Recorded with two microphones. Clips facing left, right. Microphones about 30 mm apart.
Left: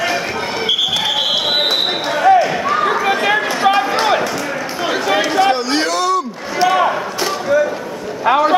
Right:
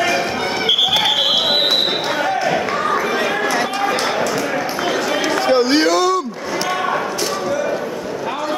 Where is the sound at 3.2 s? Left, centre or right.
Centre.